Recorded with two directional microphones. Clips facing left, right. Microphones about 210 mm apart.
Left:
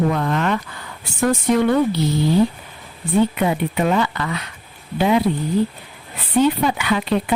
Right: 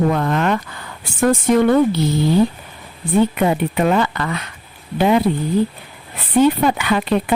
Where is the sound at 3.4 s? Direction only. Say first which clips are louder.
Right 2 dB; 55° right (ahead or behind).